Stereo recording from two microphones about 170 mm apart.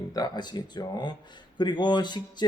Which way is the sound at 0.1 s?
25° left (ahead or behind).